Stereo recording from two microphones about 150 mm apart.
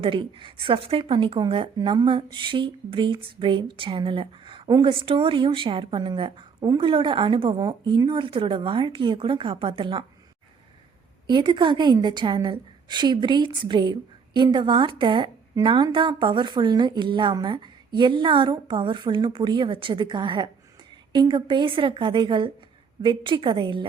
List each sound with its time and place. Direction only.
0.0 s speech: 35° right (ahead or behind)
11.3 s speech: 30° right (ahead or behind)